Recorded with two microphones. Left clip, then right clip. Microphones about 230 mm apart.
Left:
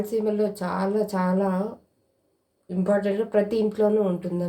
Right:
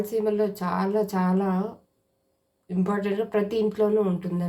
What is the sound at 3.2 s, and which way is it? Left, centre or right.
Speech, right.